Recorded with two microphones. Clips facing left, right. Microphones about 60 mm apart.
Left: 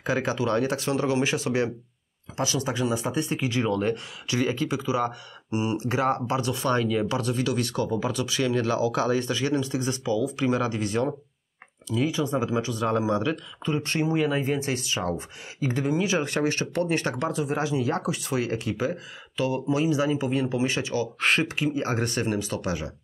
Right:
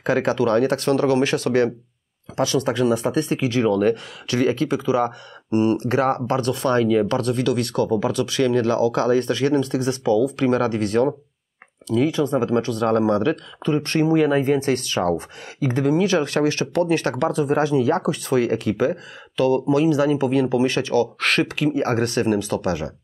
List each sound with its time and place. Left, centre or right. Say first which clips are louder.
0.0 s speech: right 6 dB; right
12.9 s speech: right 6 dB; centre
13.2 s speech: right 6 dB; right